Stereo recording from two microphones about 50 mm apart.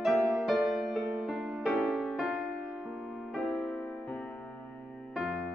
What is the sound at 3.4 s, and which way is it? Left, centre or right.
Music, centre.